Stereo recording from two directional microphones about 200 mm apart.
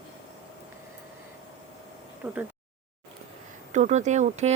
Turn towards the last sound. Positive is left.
turn(degrees=-35)  # may be behind; listen again after turning